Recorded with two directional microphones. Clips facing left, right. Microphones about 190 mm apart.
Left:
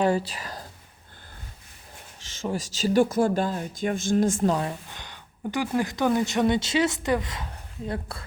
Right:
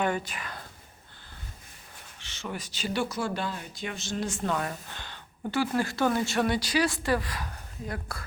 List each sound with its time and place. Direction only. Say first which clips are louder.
0.0 s speech: left 5 dB; 30° left (ahead or behind)
2.5 s speech: left 8 dB; 40° left (ahead or behind)
4.5 s speech: left 3 dB; 25° left (ahead or behind)
4.9 s speech: even; 15° left (ahead or behind)